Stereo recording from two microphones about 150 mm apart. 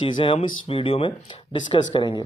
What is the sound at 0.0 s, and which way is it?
Speech, 35° left (ahead or behind).